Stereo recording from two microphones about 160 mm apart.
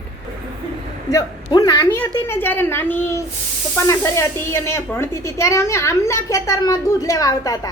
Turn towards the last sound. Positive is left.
turn(degrees=20)  # may be behind; listen again after turning